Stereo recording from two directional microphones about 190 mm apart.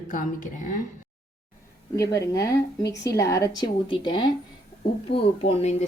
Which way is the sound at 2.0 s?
20° left (ahead or behind).